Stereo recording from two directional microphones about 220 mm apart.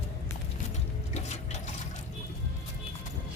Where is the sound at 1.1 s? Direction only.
30° left (ahead or behind).